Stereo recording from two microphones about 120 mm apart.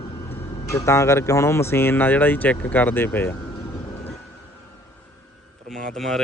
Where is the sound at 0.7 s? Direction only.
25° left (ahead or behind).